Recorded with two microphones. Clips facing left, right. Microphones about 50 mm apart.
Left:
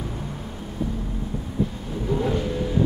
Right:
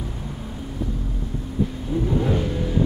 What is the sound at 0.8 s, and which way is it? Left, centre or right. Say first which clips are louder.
Vehicle: left 1 dB; centre.